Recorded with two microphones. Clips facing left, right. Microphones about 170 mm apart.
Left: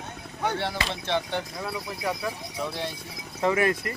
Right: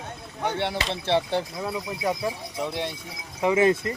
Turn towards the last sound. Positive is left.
turn(degrees=-20)  # may be behind; listen again after turning